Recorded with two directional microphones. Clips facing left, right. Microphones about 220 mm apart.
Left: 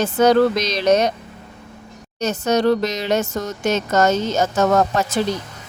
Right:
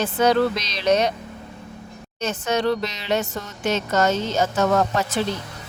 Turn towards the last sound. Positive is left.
turn(degrees=45)  # may be behind; listen again after turning